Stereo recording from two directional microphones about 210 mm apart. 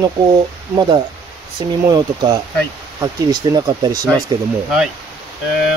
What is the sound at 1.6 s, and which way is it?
Speech, 20° right (ahead or behind).